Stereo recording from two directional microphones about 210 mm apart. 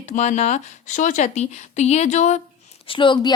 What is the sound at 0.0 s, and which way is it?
A woman's voice, 35° left (ahead or behind).